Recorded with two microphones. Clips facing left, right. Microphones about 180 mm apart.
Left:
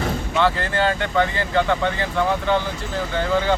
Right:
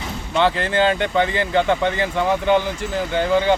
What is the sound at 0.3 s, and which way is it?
Speech, 20° right (ahead or behind).